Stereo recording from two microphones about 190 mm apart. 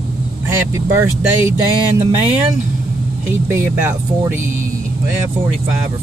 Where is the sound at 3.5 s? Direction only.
15° right (ahead or behind).